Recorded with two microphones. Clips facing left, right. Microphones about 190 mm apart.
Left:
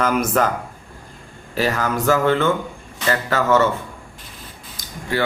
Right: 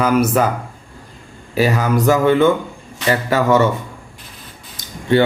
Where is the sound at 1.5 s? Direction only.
15° right (ahead or behind).